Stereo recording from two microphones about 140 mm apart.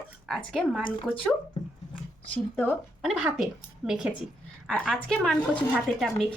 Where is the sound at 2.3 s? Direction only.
10° left (ahead or behind).